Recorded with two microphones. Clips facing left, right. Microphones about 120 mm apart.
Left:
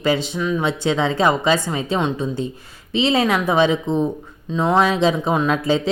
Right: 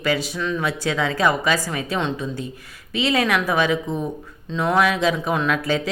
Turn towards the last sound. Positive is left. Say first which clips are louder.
# left 3 dB
turn(degrees=25)  # may be behind; listen again after turning